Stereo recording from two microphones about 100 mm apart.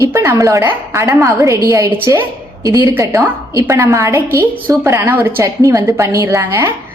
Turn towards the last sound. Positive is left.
turn(degrees=-25)  # may be behind; listen again after turning